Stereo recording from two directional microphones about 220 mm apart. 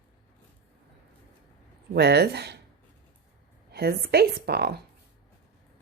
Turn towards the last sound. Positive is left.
turn(degrees=-45)  # may be behind; listen again after turning